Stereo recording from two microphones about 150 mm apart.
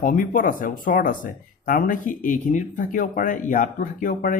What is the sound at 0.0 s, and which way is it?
Speech, 65° left (ahead or behind).